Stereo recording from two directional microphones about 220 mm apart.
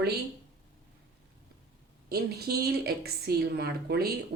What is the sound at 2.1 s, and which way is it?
A woman's voice, 45° right (ahead or behind).